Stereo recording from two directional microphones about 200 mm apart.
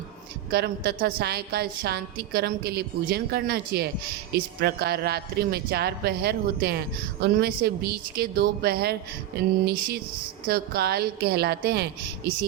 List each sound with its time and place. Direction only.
0.5 s speech: 50° right (ahead or behind)
10.4 s speech: 50° right (ahead or behind)